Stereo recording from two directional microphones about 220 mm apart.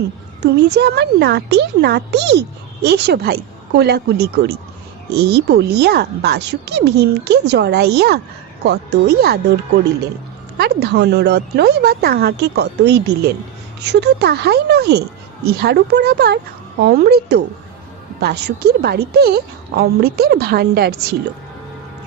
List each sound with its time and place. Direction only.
0.4 s speech: 50° right (ahead or behind)
10.6 s speech: 45° right (ahead or behind)